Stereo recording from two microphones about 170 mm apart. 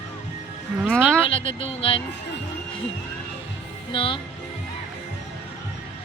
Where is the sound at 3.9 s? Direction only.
30° left (ahead or behind).